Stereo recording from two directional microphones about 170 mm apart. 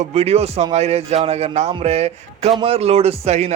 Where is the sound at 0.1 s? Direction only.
40° right (ahead or behind).